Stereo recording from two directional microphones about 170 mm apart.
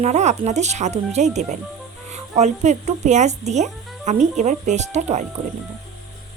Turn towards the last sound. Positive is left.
turn(degrees=-45)  # may be behind; listen again after turning